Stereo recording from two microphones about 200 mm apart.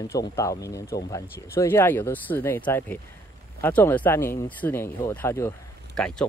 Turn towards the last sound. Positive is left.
turn(degrees=5)  # may be behind; listen again after turning